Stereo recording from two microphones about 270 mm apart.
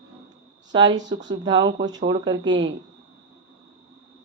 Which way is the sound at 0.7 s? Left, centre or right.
Centre.